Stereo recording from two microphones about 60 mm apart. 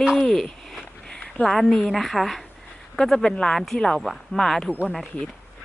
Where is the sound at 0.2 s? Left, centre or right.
Centre.